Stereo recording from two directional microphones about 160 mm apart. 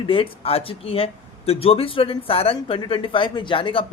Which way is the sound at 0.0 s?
35° left (ahead or behind).